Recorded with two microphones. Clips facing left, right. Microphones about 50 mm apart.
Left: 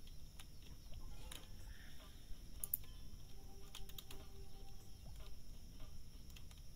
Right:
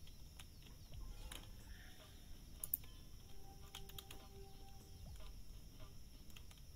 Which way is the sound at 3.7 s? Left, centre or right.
Centre.